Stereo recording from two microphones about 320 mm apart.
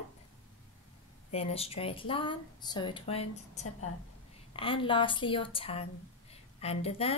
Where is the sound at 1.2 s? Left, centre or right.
Centre.